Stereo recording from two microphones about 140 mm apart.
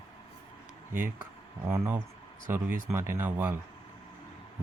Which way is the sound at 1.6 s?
20° right (ahead or behind).